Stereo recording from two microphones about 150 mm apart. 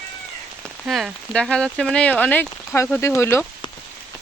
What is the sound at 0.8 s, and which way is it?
Speech, centre (ahead or behind).